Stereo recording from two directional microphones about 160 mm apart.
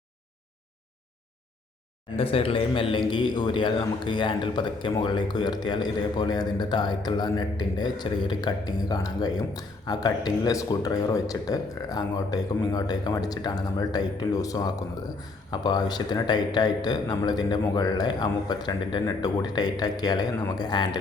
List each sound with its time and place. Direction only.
2.1 s a man's voice: 35° left (ahead or behind)